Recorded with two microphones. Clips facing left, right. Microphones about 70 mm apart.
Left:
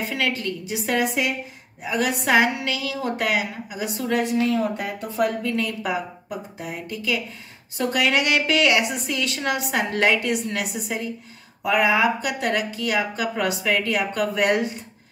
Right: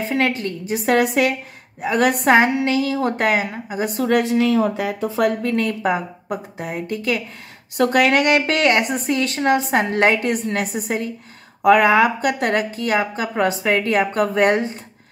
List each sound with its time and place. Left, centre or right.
0.3 s a woman's voice: right
0.7 s a woman's voice: right
2.2 s a woman's voice: right
4.2 s a woman's voice: right
5.4 s a woman's voice: right